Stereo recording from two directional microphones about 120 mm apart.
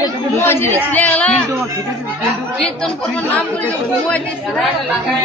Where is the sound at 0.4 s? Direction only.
20° left (ahead or behind).